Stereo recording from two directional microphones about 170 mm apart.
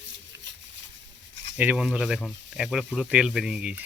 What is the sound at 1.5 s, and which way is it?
Speech, 5° right (ahead or behind).